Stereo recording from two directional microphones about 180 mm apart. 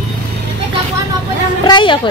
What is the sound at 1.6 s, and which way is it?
Speech, 25° left (ahead or behind).